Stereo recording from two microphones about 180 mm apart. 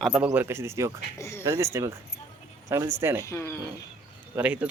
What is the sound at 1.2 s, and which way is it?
Speech, 15° left (ahead or behind).